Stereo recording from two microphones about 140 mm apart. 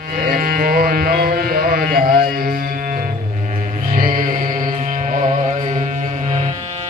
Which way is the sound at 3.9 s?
75° right (ahead or behind).